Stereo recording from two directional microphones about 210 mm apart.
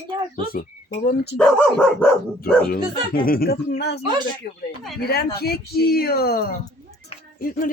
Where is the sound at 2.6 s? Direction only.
45° left (ahead or behind).